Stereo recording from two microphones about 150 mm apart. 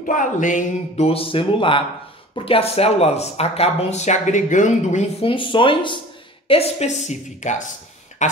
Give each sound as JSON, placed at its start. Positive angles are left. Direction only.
{"t": 0.0, "sound": "speech", "side_deg": 60}
{"t": 5.3, "sound": "speech", "side_deg": 35}
{"t": 8.2, "sound": "a sound", "side_deg": 50}